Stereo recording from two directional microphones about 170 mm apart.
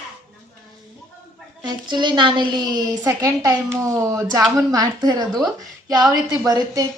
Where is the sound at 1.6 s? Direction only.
25° right (ahead or behind).